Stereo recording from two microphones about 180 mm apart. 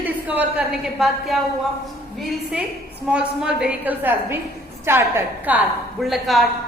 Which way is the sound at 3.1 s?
5° right (ahead or behind).